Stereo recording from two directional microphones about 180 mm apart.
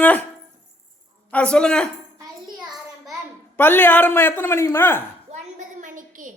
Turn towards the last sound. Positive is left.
turn(degrees=-45)  # may be behind; listen again after turning